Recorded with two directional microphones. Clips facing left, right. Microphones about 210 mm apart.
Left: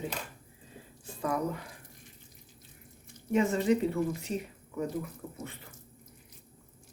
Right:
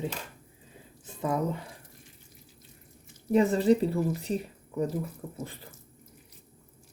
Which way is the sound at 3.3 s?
35° right (ahead or behind).